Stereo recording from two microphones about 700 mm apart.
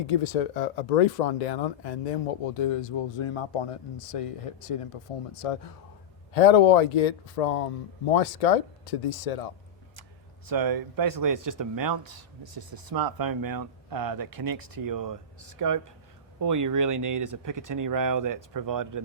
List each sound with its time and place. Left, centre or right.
0.0 s speech: left
6.3 s speech: left
10.4 s speech: right